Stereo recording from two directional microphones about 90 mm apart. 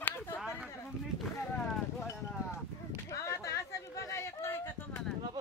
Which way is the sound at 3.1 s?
35° left (ahead or behind).